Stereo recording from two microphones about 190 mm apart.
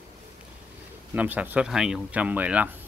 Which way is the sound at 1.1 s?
10° right (ahead or behind).